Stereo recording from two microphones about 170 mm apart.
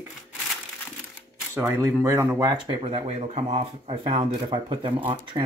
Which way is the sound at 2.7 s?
35° right (ahead or behind).